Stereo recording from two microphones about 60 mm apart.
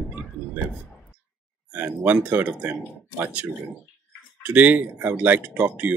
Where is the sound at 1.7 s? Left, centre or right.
Right.